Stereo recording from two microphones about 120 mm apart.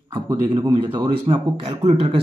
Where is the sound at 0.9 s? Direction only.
45° right (ahead or behind).